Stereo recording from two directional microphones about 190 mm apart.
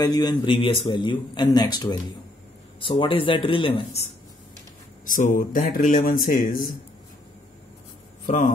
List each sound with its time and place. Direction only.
0.0 s a man's voice: 20° left (ahead or behind)
5.0 s speech: 45° left (ahead or behind)
8.3 s a man's voice: 40° left (ahead or behind)